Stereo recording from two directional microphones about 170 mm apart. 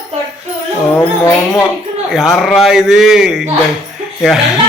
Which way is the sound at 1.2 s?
15° left (ahead or behind).